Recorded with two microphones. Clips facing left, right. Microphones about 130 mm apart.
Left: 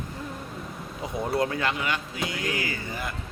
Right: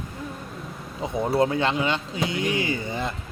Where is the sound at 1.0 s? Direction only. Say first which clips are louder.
Right 4 dB; 25° right (ahead or behind).